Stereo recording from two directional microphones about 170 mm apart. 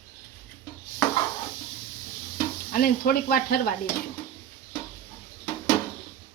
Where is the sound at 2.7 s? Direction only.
60° left (ahead or behind).